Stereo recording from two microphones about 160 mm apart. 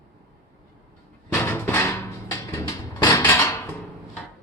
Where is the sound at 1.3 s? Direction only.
15° left (ahead or behind).